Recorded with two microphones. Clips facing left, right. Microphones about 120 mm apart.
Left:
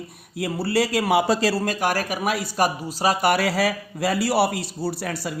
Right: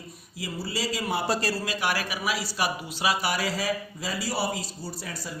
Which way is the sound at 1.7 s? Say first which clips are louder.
Left 5 dB; 45° left (ahead or behind).